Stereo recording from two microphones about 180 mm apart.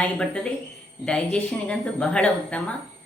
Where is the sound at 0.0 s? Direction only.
5° left (ahead or behind).